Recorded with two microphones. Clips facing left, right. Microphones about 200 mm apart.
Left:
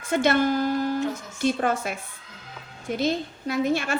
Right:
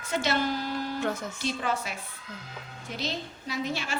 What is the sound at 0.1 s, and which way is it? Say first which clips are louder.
A woman's voice: left 7 dB; 55° left (ahead or behind).